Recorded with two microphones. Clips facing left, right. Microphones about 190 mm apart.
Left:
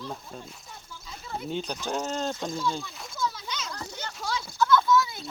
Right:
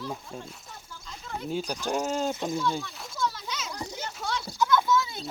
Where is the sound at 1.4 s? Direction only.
5° right (ahead or behind).